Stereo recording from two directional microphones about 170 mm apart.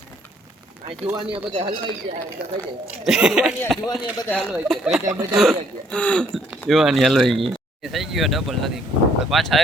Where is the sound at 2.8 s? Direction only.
5° right (ahead or behind).